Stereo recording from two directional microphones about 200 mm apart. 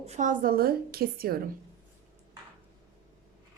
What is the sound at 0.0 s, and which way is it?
A woman's voice, 35° right (ahead or behind).